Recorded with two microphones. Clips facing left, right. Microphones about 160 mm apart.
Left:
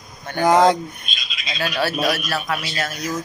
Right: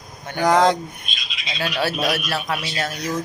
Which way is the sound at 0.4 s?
5° left (ahead or behind).